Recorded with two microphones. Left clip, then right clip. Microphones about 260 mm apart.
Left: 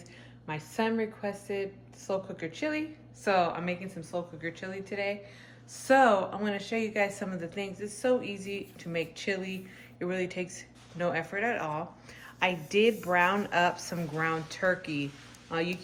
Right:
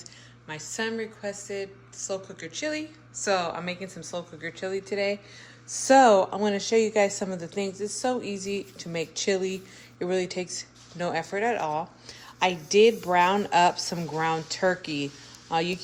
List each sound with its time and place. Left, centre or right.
0.7 s a woman's voice: centre; by 15.6 s right